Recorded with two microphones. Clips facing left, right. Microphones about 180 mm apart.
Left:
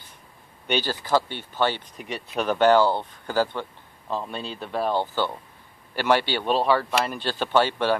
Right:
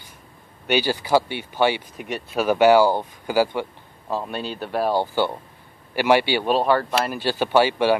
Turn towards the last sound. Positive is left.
turn(degrees=-10)  # may be behind; listen again after turning